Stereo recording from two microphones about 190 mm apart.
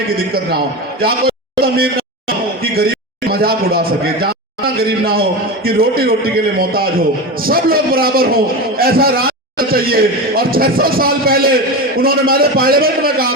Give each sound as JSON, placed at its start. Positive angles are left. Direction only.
{"t": 1.5, "sound": "a man's voice", "side_deg": -55}